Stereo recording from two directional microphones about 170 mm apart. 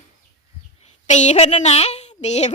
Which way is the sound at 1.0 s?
45° left (ahead or behind).